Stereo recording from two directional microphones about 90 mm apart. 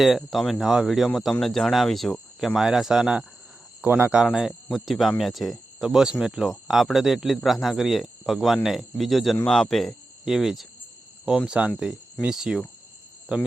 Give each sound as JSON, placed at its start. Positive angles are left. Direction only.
{"t": 0.0, "sound": "speech", "side_deg": 0}
{"t": 3.8, "sound": "speech", "side_deg": -20}
{"t": 4.1, "sound": "speech", "side_deg": -5}